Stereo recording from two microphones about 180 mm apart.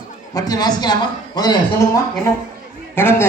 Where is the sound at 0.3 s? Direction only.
20° left (ahead or behind).